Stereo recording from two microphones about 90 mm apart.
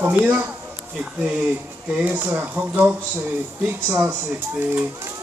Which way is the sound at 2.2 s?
20° right (ahead or behind).